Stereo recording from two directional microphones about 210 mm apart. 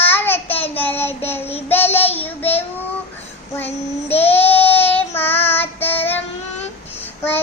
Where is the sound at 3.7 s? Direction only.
30° left (ahead or behind).